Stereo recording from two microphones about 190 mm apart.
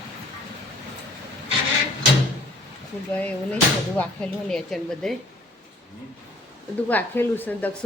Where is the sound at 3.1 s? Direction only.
10° left (ahead or behind).